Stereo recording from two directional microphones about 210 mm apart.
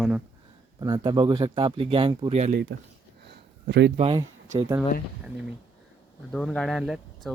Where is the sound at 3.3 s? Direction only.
50° right (ahead or behind).